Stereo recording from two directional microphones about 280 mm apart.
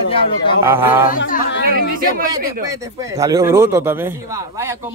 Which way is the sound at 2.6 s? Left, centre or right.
Centre.